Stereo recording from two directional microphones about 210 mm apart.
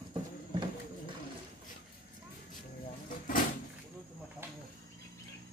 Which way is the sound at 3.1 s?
40° left (ahead or behind).